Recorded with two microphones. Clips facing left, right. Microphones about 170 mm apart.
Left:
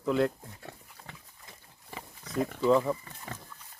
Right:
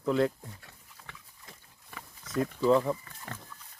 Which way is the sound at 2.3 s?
Centre (ahead or behind).